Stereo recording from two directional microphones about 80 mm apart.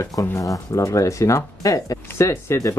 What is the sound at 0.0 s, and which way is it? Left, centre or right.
Speech, left.